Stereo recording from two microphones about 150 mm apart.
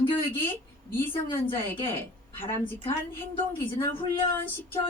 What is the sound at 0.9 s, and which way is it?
A woman's voice, 15° left (ahead or behind).